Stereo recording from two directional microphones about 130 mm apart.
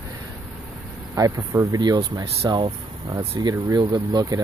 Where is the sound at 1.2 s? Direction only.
30° right (ahead or behind).